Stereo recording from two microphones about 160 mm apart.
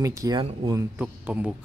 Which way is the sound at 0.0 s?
20° right (ahead or behind).